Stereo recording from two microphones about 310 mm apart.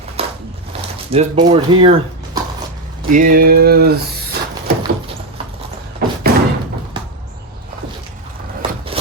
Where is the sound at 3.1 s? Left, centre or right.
Right.